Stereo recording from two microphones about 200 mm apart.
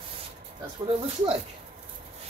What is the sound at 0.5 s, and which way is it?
Speech, 20° right (ahead or behind).